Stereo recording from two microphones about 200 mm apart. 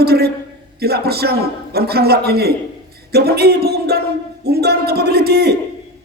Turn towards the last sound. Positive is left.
turn(degrees=-55)  # may be behind; listen again after turning